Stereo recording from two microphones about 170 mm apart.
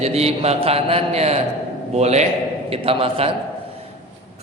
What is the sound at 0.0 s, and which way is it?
A man's voice, 35° right (ahead or behind).